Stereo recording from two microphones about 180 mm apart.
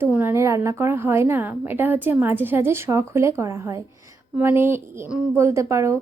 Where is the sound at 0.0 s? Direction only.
10° right (ahead or behind).